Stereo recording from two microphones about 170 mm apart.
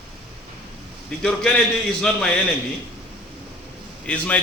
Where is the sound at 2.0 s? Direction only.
5° left (ahead or behind).